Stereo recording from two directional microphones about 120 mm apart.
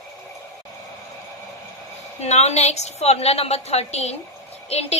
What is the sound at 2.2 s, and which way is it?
A woman's voice, 65° left (ahead or behind).